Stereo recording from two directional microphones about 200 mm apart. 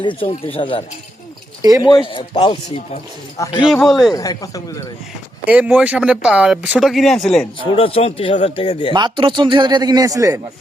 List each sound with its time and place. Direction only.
0.0 s speech: 25° left (ahead or behind)
1.8 s speech: 20° left (ahead or behind)
3.7 s speech: centre (ahead or behind)
4.1 s speech: 15° left (ahead or behind)
5.5 s speech: 5° right (ahead or behind)
7.6 s speech: 30° left (ahead or behind)
8.9 s speech: 20° right (ahead or behind)